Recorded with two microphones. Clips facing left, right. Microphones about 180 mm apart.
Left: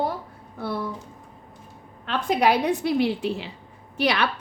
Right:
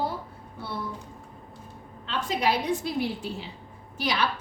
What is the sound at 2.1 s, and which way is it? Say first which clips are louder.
A woman's voice: left 5 dB; 60° left (ahead or behind).